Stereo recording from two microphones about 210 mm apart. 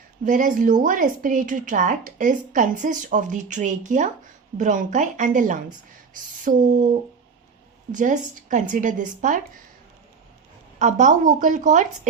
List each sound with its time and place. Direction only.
0.3 s speech: 40° right (ahead or behind)
7.9 s speech: 35° right (ahead or behind)
10.8 s speech: 35° right (ahead or behind)